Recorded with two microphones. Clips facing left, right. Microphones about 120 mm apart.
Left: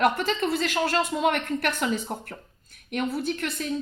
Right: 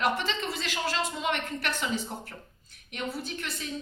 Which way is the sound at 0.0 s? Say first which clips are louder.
Left 6 dB; 50° left (ahead or behind).